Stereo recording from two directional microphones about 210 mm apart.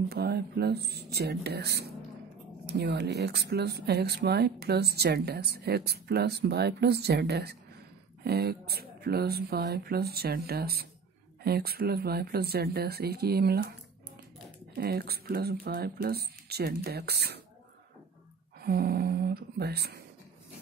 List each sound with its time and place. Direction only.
0.1 s a woman's voice: 50° right (ahead or behind)
14.8 s a woman's voice: 50° right (ahead or behind)
18.6 s speech: 50° right (ahead or behind)